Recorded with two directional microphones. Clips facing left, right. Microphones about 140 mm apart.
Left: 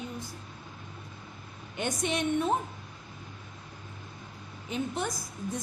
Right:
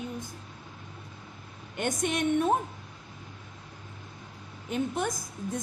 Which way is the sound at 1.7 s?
50° right (ahead or behind).